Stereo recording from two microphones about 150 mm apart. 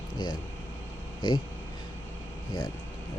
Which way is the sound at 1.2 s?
30° left (ahead or behind).